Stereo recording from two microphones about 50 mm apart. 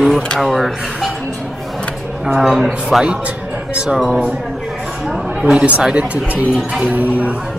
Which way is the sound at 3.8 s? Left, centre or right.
Centre.